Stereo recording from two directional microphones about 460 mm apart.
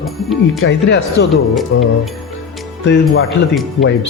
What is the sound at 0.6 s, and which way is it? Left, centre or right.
Speech, left.